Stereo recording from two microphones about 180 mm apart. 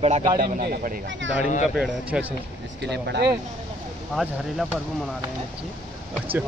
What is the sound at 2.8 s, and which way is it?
Speech, 70° right (ahead or behind).